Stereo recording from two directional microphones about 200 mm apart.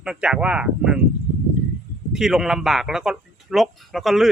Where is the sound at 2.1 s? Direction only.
Centre (ahead or behind).